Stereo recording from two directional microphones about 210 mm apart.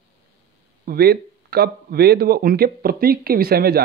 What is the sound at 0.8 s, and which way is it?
Speech, 45° right (ahead or behind).